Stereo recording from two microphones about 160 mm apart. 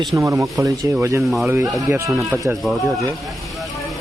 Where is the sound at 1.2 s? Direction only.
Centre (ahead or behind).